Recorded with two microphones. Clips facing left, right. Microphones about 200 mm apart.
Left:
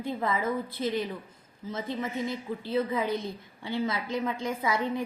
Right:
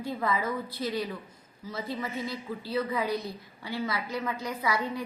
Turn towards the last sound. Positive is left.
turn(degrees=25)  # may be behind; listen again after turning